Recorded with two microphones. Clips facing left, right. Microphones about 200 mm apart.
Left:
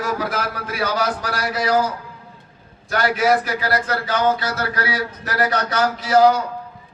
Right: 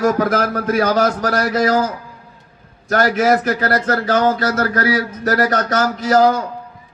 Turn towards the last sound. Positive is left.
turn(degrees=-40)  # may be behind; listen again after turning